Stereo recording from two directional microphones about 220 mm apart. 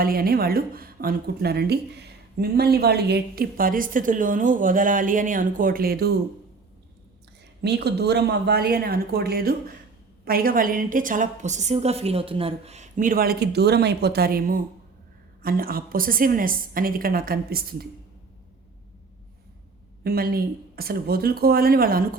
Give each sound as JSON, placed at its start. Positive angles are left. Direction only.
{"t": 0.0, "sound": "speech", "side_deg": -40}
{"t": 7.6, "sound": "a woman's voice", "side_deg": -50}
{"t": 20.1, "sound": "speech", "side_deg": -40}